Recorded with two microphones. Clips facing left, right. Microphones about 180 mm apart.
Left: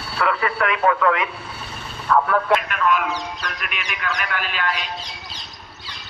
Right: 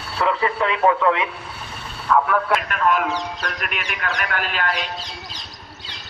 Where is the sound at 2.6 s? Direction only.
45° right (ahead or behind).